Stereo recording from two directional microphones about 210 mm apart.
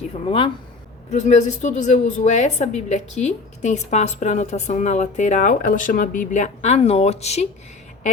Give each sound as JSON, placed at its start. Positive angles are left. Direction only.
{"t": 0.3, "sound": "a woman's voice", "side_deg": 25}